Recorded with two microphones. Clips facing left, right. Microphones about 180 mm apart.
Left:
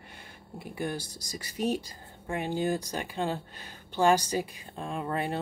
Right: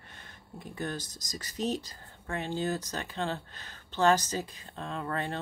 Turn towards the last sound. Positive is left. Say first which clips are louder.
# left 3 dB
turn(degrees=10)  # may be behind; listen again after turning